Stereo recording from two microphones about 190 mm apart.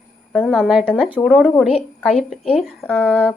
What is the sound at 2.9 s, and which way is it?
Speech, 5° left (ahead or behind).